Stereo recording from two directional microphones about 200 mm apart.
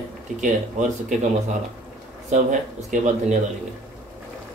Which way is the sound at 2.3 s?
35° right (ahead or behind).